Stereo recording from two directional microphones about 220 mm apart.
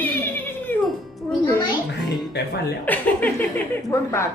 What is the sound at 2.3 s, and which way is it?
Speech, 50° left (ahead or behind).